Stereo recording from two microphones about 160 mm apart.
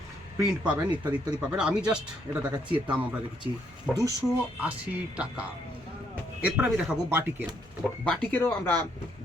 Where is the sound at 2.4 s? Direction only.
25° right (ahead or behind).